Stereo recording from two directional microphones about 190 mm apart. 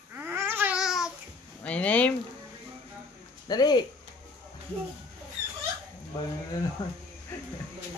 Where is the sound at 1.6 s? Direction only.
5° left (ahead or behind).